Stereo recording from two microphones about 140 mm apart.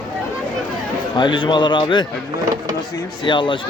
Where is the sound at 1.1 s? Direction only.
35° left (ahead or behind).